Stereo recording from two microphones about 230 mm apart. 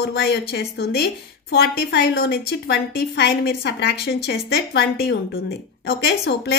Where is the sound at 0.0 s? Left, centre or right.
Left.